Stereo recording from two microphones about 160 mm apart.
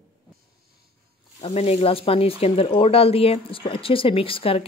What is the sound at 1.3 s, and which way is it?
Speech, 45° left (ahead or behind).